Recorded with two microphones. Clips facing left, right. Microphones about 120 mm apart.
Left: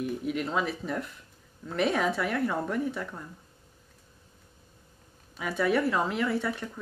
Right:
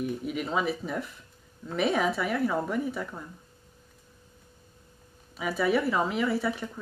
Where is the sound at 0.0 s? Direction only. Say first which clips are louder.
Left 1 dB; centre (ahead or behind).